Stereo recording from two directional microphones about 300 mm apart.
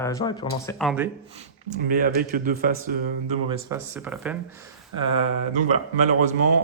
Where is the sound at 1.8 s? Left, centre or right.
Right.